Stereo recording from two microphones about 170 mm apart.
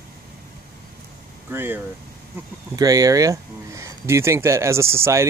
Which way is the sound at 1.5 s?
15° right (ahead or behind).